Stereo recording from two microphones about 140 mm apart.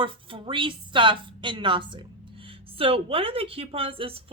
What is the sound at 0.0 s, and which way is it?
A woman's voice, 35° right (ahead or behind).